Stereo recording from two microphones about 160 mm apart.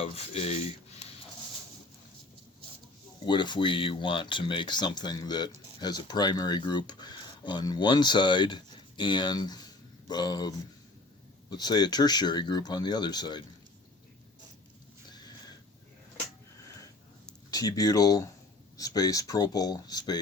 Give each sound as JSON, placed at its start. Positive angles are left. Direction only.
{"t": 0.0, "sound": "cutlery", "side_deg": 40}
{"t": 3.2, "sound": "speech", "side_deg": 30}
{"t": 15.1, "sound": "sniff", "side_deg": 25}
{"t": 17.5, "sound": "speech", "side_deg": 25}